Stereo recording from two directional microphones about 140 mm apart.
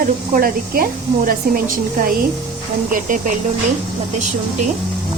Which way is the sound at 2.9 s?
75° right (ahead or behind).